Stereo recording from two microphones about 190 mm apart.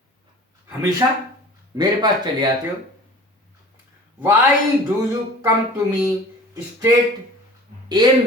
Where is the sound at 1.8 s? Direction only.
20° right (ahead or behind).